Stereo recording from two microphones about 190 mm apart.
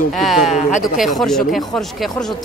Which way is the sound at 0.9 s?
Centre (ahead or behind).